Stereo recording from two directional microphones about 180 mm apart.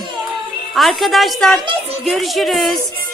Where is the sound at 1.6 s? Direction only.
25° right (ahead or behind).